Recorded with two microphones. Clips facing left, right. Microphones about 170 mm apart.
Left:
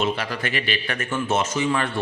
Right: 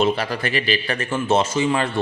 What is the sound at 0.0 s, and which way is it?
Speech, 35° right (ahead or behind).